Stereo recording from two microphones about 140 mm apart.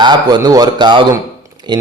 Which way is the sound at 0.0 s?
30° right (ahead or behind).